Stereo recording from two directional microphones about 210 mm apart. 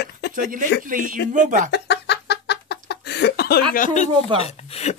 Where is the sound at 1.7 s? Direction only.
50° left (ahead or behind).